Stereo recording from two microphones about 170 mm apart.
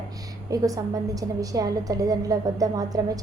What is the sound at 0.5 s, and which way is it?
A woman's voice, 20° right (ahead or behind).